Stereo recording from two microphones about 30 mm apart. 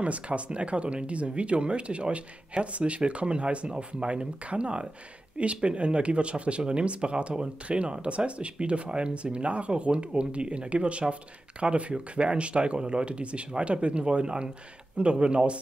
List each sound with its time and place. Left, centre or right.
0.0 s speech: right